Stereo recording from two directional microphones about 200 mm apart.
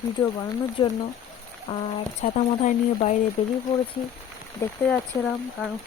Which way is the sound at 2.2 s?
40° left (ahead or behind).